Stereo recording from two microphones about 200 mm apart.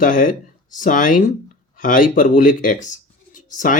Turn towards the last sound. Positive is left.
turn(degrees=40)  # may be behind; listen again after turning